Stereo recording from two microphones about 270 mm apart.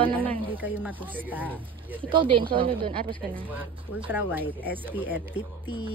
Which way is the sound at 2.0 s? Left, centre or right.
Centre.